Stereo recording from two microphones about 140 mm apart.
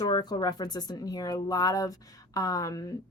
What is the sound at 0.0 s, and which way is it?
Speech, 30° left (ahead or behind).